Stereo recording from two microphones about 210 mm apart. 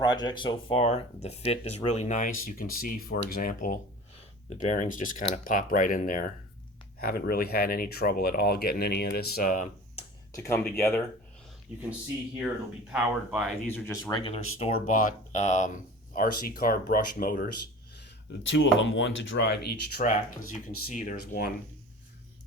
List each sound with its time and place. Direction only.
0.0 s speech: 20° left (ahead or behind); by 10.0 s 35° left (ahead or behind)
10.3 s speech: 10° left (ahead or behind)
11.7 s speech: 5° right (ahead or behind)
12.9 s speech: 5° right (ahead or behind)
13.7 s speech: 10° left (ahead or behind)
14.1 s speech: 25° left (ahead or behind); by 17.5 s 45° left (ahead or behind)
18.5 s speech: 60° left (ahead or behind); by 21.2 s 40° left (ahead or behind)